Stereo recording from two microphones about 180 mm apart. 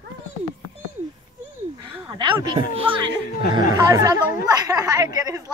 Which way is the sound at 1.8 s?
25° right (ahead or behind).